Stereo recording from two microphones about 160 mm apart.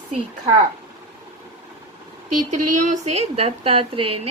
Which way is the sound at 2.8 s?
45° right (ahead or behind).